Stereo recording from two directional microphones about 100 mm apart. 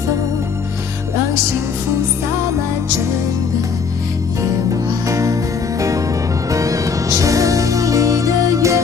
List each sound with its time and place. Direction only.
5.0 s music: 35° right (ahead or behind)